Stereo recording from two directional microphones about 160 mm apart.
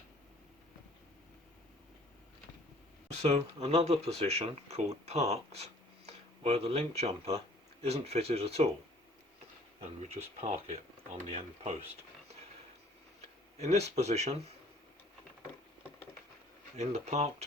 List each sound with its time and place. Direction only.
3.2 s speech: 40° right (ahead or behind)
9.8 s speech: 45° right (ahead or behind)
13.6 s speech: 45° right (ahead or behind)
16.7 s speech: 45° right (ahead or behind)